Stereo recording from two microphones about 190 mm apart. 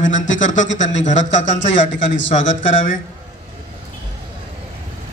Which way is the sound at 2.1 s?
75° left (ahead or behind).